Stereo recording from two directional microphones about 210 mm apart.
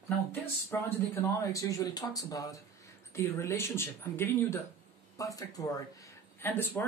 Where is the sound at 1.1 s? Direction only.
15° left (ahead or behind).